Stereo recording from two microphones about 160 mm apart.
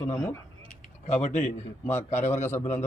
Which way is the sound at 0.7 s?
45° left (ahead or behind).